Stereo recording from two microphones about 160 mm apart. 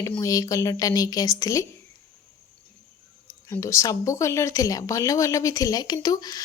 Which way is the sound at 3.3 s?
20° left (ahead or behind).